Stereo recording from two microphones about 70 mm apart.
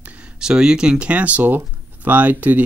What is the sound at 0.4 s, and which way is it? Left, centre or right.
Speech, centre.